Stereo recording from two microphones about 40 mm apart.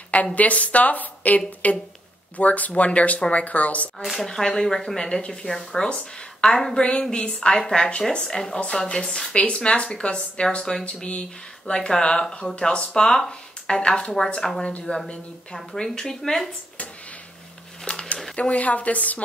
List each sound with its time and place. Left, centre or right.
0.1 s speech: left
4.2 s speech: centre
8.3 s speech: centre
9.3 s speech: left
10.6 s speech: centre
10.9 s speech: left
14.9 s speech: left
15.5 s speech: centre
17.9 s a sound: left
18.3 s speech: left